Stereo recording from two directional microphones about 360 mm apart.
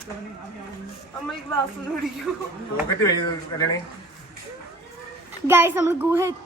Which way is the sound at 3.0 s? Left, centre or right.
Centre.